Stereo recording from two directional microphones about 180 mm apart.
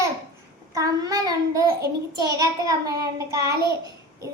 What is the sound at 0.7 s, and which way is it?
Child singing, 20° right (ahead or behind).